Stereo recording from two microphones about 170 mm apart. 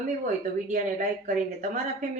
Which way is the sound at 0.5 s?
50° right (ahead or behind).